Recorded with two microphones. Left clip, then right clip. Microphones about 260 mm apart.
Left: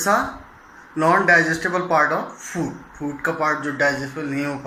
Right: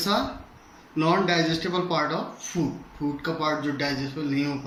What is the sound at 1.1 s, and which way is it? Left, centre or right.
Speech, right.